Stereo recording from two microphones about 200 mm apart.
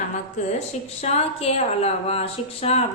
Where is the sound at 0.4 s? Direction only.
35° left (ahead or behind).